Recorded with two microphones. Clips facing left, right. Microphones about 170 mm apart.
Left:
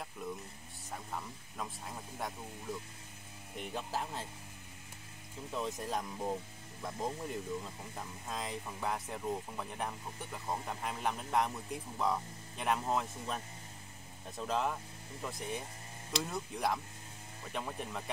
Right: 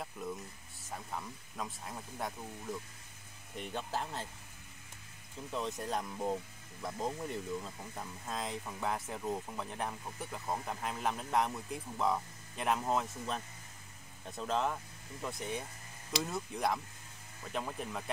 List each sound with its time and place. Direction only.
0.9 s speech: centre (ahead or behind)
3.5 s speech: centre (ahead or behind)
5.5 s speech: centre (ahead or behind)